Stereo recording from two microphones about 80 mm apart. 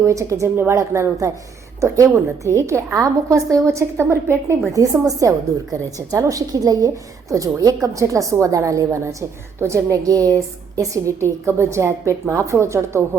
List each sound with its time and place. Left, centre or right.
0.0 s a woman's voice: right
4.7 s a woman's voice: right